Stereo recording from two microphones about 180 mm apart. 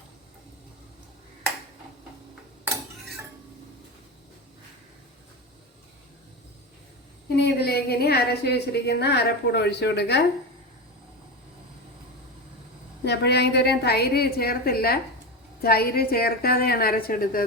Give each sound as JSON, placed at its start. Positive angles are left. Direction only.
{"t": 7.3, "sound": "a woman's voice", "side_deg": 65}
{"t": 13.1, "sound": "a woman's voice", "side_deg": 70}